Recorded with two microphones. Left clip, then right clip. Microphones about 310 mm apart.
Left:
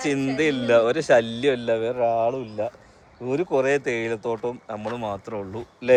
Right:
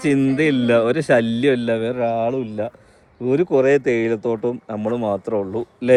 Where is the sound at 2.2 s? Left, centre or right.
Right.